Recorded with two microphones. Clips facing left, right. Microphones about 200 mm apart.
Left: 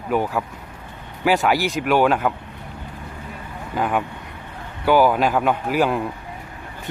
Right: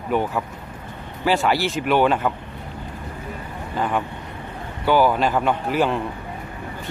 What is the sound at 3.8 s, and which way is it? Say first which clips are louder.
A man's voice: left 1 dB; 10° left (ahead or behind).